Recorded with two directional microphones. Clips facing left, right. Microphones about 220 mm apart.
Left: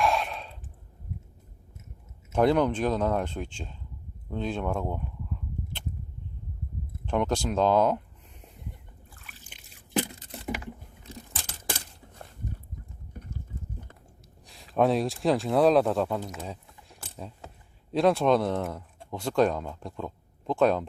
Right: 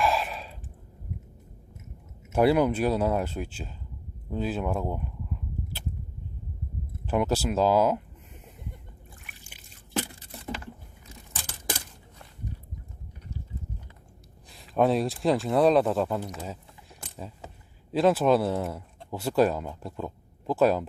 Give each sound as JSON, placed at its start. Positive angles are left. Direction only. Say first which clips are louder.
{"t": 0.0, "sound": "sigh", "louder": "even", "side_deg": 0}
{"t": 2.3, "sound": "speech", "louder": "right 1 dB", "side_deg": -10}
{"t": 7.0, "sound": "speech", "louder": "right 1 dB", "side_deg": -5}
{"t": 9.9, "sound": "a sound", "louder": "left 3 dB", "side_deg": 15}
{"t": 14.4, "sound": "speech", "louder": "even", "side_deg": 0}
{"t": 17.2, "sound": "keys jangling", "louder": "right 1 dB", "side_deg": -5}
{"t": 17.9, "sound": "speech", "louder": "right 1 dB", "side_deg": -5}